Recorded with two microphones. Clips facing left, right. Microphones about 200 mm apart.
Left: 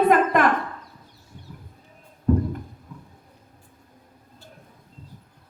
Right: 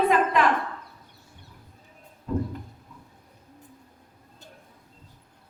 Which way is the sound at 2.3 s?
55° left (ahead or behind).